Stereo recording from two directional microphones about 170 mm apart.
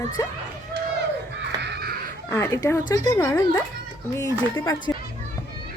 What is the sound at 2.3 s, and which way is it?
Speech, 20° left (ahead or behind).